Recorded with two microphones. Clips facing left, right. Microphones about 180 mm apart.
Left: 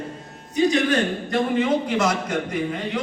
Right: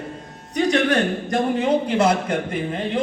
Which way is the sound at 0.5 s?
60° right (ahead or behind).